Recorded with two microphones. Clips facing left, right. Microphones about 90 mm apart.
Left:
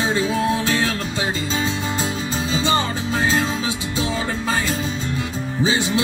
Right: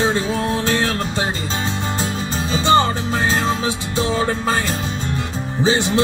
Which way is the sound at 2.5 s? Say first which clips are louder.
Right 6 dB; 50° right (ahead or behind).